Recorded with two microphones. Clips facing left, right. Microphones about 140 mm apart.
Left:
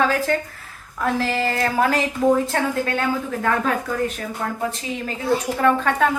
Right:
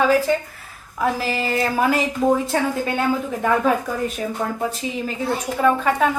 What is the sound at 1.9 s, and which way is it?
Speech, 10° right (ahead or behind).